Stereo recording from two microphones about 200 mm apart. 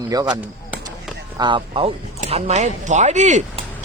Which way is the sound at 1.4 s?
25° right (ahead or behind).